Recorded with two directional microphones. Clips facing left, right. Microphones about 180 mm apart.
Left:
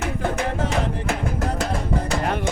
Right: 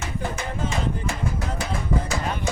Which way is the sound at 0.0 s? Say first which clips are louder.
Left 6 dB; 65° left (ahead or behind).